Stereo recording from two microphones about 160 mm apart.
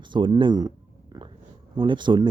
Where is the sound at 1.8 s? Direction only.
30° right (ahead or behind).